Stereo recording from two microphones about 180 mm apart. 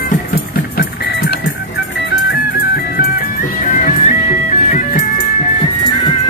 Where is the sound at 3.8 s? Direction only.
45° left (ahead or behind).